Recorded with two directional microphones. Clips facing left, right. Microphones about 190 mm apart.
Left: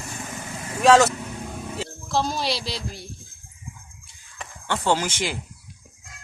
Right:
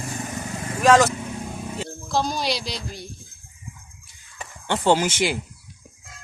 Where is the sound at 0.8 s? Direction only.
Centre (ahead or behind).